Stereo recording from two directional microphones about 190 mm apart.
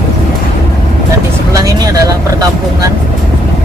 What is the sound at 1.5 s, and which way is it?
Speech, 20° right (ahead or behind).